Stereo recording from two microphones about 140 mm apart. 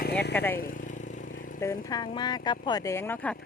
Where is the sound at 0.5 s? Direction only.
65° left (ahead or behind).